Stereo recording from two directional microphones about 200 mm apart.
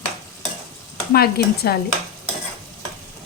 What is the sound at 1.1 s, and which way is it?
Speech, 50° left (ahead or behind).